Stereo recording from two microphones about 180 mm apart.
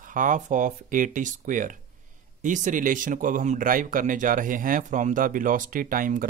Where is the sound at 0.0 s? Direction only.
45° right (ahead or behind).